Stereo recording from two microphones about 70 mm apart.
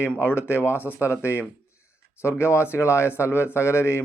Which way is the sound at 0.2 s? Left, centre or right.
Left.